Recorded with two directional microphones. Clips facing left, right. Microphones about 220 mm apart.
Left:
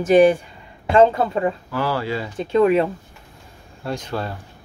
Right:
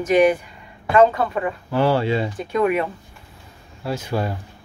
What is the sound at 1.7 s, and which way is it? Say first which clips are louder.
Speech: right 5 dB; 25° right (ahead or behind).